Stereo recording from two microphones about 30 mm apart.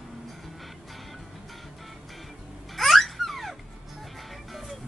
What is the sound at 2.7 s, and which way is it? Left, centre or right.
Babbling, centre.